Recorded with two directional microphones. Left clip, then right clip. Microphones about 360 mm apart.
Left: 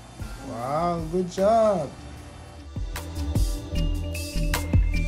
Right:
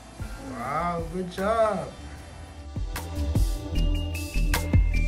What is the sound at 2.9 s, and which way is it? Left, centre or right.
Music, centre.